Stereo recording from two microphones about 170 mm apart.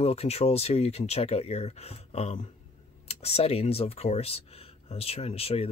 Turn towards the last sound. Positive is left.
turn(degrees=35)  # may be behind; listen again after turning